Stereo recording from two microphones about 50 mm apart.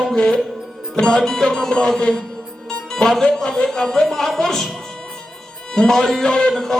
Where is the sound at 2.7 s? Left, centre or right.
Centre.